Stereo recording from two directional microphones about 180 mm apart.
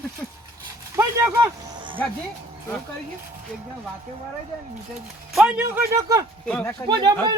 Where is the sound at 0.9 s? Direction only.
15° right (ahead or behind).